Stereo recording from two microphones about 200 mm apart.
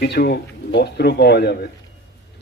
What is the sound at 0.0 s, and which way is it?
A man's voice, 55° left (ahead or behind).